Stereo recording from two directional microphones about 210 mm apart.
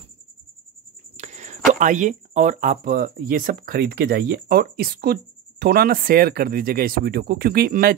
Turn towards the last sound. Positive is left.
turn(degrees=-45)  # may be behind; listen again after turning